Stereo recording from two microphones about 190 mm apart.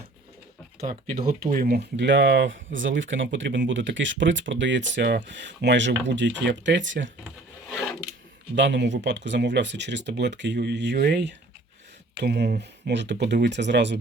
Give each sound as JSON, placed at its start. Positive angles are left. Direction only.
{"t": 0.9, "sound": "speech", "side_deg": -50}
{"t": 7.7, "sound": "filing", "side_deg": 0}
{"t": 8.5, "sound": "speech", "side_deg": -70}